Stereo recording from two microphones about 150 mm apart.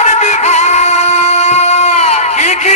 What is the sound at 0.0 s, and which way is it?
Music, 50° left (ahead or behind).